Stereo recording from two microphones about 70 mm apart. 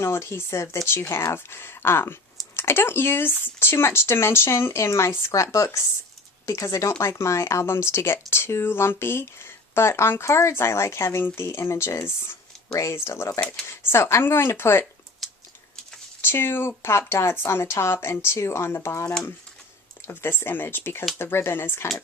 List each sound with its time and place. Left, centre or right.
0.0 s speech: left
15.2 s typing: centre
16.2 s speech: left